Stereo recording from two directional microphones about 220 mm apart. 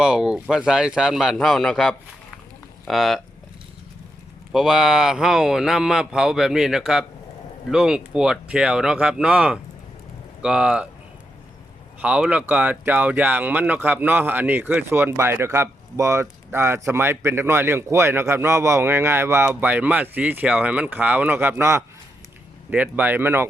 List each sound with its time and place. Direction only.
0.0 s speech: 5° right (ahead or behind)
4.5 s speech: centre (ahead or behind)
12.0 s speech: 5° right (ahead or behind)